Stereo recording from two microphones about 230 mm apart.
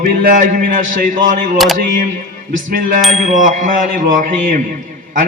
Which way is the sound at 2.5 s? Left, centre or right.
Right.